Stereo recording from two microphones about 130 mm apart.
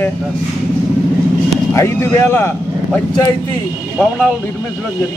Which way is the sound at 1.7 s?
20° left (ahead or behind).